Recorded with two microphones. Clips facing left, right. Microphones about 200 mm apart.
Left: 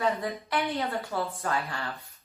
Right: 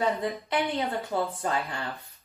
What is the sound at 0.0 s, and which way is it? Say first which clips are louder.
A woman's voice: right 1 dB; 20° right (ahead or behind).